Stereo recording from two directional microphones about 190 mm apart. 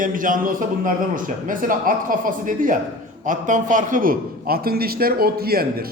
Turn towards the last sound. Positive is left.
turn(degrees=-55)  # may be behind; listen again after turning